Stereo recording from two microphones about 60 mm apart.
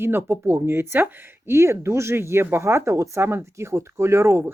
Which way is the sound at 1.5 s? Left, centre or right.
Right.